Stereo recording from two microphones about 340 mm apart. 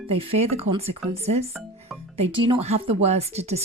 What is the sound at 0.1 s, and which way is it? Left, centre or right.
Speech, centre.